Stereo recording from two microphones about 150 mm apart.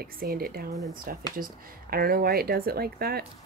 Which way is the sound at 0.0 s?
85° right.